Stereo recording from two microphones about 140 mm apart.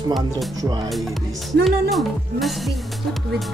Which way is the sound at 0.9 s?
Centre (ahead or behind).